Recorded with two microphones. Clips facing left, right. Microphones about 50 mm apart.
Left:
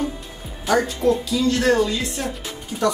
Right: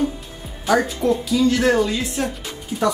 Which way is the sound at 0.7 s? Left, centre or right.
Centre.